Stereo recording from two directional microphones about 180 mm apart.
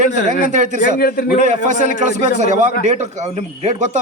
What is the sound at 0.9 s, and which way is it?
Speech, 55° left (ahead or behind).